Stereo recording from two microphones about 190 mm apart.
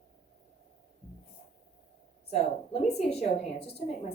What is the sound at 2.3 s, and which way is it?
A woman's voice, 35° left (ahead or behind).